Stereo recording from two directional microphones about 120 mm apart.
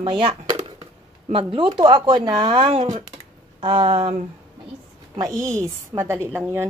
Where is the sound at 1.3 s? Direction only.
45° right (ahead or behind).